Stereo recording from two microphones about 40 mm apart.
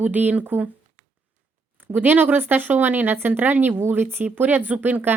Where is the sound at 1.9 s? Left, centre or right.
Right.